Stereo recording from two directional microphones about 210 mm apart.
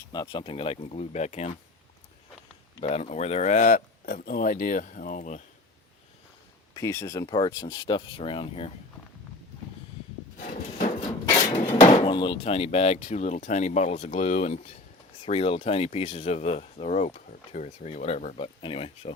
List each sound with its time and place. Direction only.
0.1 s speech: 20° left (ahead or behind)
2.8 s speech: 30° left (ahead or behind)
6.7 s speech: 15° left (ahead or behind)
10.3 s a sound: 40° left (ahead or behind)
11.5 s speech: 25° left (ahead or behind)